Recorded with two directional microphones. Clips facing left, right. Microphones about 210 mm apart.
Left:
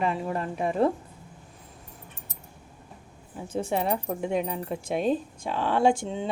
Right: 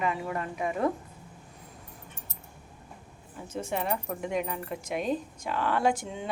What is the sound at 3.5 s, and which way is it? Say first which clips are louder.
Speech: left 4 dB; 30° left (ahead or behind).